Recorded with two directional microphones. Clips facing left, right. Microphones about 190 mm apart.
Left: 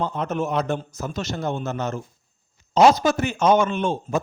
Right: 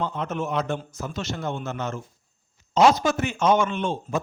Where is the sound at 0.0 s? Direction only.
40° left (ahead or behind).